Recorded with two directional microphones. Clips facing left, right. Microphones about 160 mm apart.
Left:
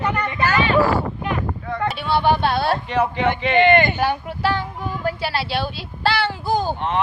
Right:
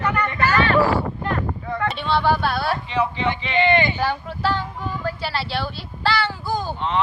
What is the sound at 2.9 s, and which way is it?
A man's voice, 50° left (ahead or behind).